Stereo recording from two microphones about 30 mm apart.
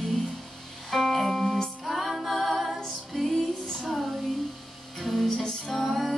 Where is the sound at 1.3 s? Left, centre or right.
Left.